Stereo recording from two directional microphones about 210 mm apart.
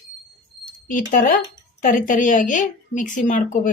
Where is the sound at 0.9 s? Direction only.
40° left (ahead or behind).